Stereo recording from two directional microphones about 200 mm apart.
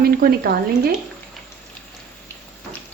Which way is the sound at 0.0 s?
50° right (ahead or behind).